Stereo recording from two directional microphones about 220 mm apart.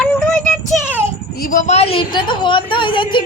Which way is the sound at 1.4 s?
35° left (ahead or behind).